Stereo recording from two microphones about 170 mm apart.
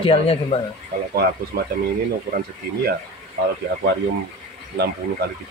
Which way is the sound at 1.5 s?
65° right (ahead or behind).